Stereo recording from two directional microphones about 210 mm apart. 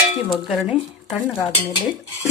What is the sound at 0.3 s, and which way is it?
Speech, centre (ahead or behind).